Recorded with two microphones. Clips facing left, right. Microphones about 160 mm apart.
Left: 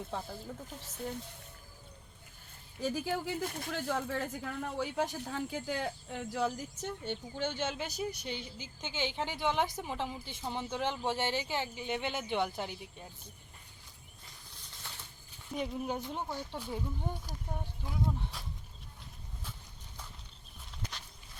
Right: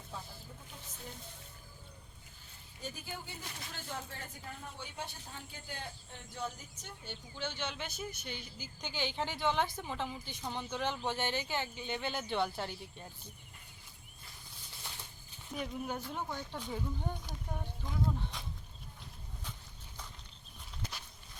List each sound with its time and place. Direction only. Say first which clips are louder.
0.1 s speech: left 8 dB; 70° left (ahead or behind)
2.8 s speech: left 11 dB; 90° left
3.4 s speech: left 11 dB; 50° left (ahead or behind)
3.7 s a man's voice: left 9 dB; 80° left; by 13.1 s 10° left (ahead or behind)
14.8 s a sound: even; 15° right (ahead or behind)
15.5 s speech: left 3 dB; 20° left (ahead or behind)
16.5 s speech: left 1 dB; 5° left (ahead or behind)